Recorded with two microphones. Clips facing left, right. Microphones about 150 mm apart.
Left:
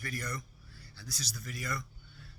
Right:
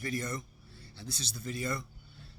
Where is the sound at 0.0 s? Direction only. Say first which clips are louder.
Right 4 dB; 25° right (ahead or behind).